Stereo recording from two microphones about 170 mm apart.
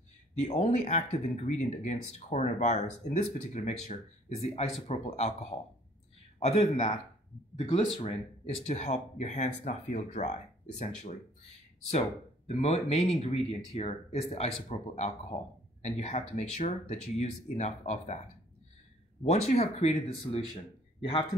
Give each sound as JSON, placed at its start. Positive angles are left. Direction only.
{"t": 0.4, "sound": "speech", "side_deg": 40}
{"t": 12.4, "sound": "speech", "side_deg": 40}
{"t": 19.2, "sound": "a man's voice", "side_deg": 40}